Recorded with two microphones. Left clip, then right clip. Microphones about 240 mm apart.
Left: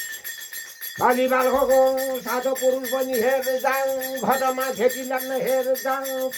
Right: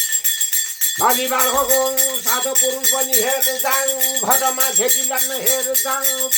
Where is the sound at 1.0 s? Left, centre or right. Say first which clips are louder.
Right 1 dB; right.